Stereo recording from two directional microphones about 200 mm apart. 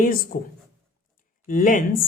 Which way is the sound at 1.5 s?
45° left (ahead or behind).